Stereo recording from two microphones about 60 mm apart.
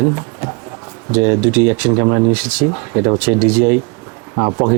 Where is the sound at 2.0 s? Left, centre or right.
Right.